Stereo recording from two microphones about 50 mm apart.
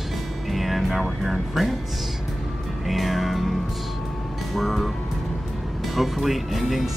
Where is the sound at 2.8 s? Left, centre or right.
Centre.